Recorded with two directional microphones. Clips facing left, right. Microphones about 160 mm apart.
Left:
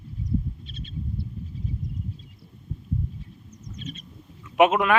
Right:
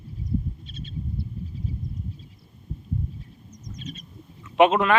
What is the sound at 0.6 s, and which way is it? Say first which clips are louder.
Owl: right 1 dB; 45° right (ahead or behind).